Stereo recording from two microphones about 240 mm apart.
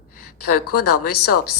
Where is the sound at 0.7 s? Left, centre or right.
Left.